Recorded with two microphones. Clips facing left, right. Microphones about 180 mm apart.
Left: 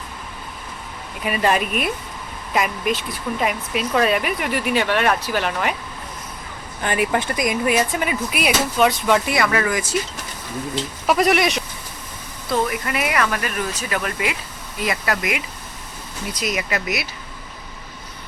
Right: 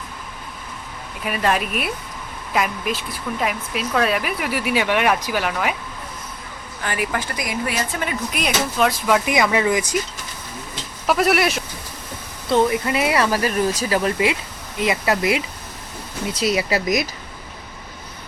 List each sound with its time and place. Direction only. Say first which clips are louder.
1.2 s speech: left 1 dB; centre (ahead or behind)
6.8 s speech: left 4 dB; 25° left (ahead or behind); by 9.2 s centre (ahead or behind)
9.2 s speech: right 2 dB; 15° right (ahead or behind)
11.0 s speech: even; centre (ahead or behind)
12.5 s speech: right 4 dB; 25° right (ahead or behind)